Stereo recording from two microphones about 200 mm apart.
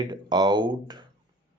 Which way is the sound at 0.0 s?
20° right (ahead or behind).